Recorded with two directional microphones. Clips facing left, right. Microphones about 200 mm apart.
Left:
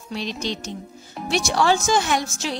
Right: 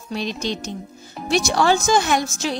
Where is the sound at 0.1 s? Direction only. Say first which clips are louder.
Right 2 dB; 50° right (ahead or behind).